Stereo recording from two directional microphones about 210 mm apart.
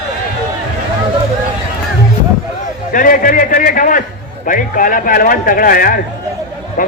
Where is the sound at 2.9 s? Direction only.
40° left (ahead or behind).